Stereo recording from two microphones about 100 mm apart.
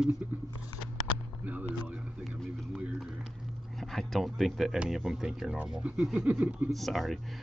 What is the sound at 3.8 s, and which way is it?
Speech, centre (ahead or behind).